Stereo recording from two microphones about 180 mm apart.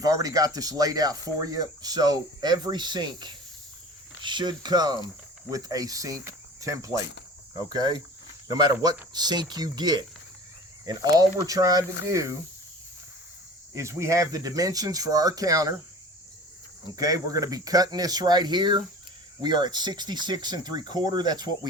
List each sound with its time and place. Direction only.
0.0 s speech: 20° right (ahead or behind)
8.4 s speech: 20° right (ahead or behind)
13.7 s speech: 15° right (ahead or behind)
16.8 s speech: 20° right (ahead or behind)